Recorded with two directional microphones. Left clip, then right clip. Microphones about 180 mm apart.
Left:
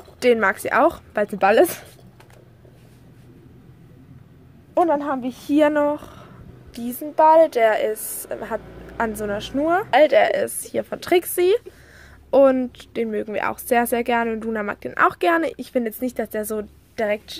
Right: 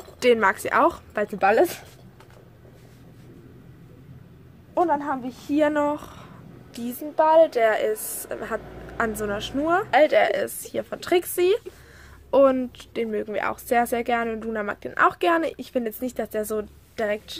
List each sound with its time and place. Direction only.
0.2 s a woman's voice: 20° left (ahead or behind); by 1.9 s 40° left (ahead or behind)
4.7 s a woman's voice: 45° left (ahead or behind)
5.6 s a sound: 20° left (ahead or behind)
7.2 s a woman's voice: 35° left (ahead or behind)